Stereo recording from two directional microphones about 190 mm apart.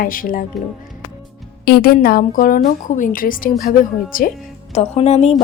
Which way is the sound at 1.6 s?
55° left (ahead or behind).